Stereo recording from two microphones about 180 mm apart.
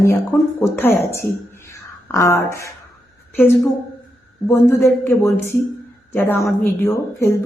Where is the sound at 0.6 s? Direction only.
10° left (ahead or behind).